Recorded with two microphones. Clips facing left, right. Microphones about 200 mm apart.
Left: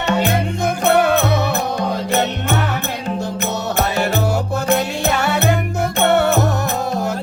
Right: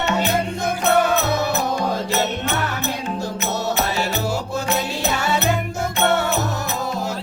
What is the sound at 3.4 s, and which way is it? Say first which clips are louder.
Music: left 1 dB; 55° left (ahead or behind).